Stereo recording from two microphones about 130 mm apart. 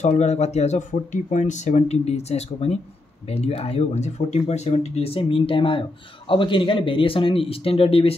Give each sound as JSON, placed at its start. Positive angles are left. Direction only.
{"t": 0.0, "sound": "speech", "side_deg": 60}